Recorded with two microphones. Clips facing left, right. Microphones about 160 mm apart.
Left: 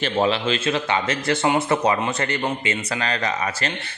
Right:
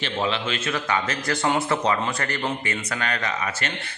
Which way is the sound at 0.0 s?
35° left (ahead or behind).